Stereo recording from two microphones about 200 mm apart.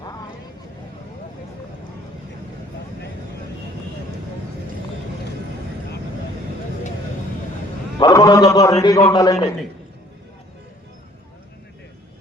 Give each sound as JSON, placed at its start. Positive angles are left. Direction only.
{"t": 7.9, "sound": "a man's voice", "side_deg": 20}